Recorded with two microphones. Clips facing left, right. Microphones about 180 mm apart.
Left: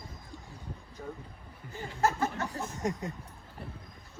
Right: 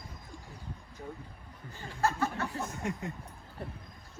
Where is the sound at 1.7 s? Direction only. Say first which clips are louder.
Left 2 dB; 20° left (ahead or behind).